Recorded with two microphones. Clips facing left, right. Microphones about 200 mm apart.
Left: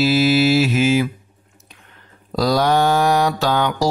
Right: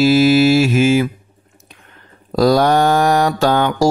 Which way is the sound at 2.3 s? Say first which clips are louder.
Right 4 dB; 50° right (ahead or behind).